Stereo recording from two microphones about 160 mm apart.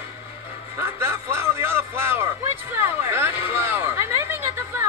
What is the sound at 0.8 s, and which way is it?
Music, 15° right (ahead or behind).